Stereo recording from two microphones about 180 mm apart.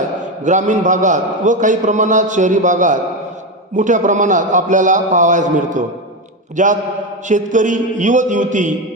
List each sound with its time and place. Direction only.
0.4 s a man's voice: 45° right (ahead or behind)